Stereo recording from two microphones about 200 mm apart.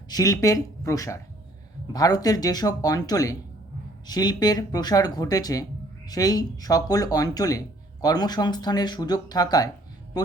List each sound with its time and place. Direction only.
0.1 s speech: 15° left (ahead or behind)